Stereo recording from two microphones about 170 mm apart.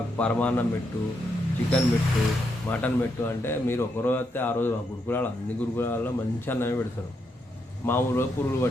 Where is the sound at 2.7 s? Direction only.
10° left (ahead or behind).